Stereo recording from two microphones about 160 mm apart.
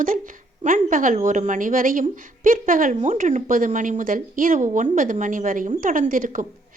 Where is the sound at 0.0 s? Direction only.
60° right (ahead or behind).